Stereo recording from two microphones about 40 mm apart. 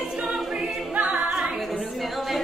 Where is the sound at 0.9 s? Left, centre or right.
Right.